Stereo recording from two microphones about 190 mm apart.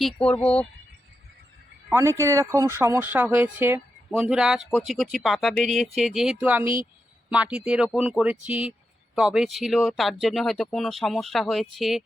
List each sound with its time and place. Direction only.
0.0 s speech: 5° left (ahead or behind)
1.9 s speech: 15° right (ahead or behind)